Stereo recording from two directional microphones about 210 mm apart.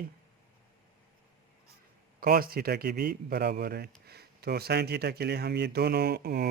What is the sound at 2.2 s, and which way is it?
Speech, 45° right (ahead or behind).